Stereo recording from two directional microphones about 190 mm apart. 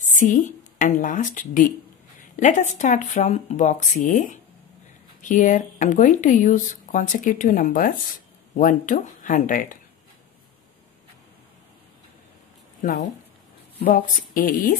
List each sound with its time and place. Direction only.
0.0 s a woman's voice: 45° left (ahead or behind)
12.8 s speech: 45° left (ahead or behind)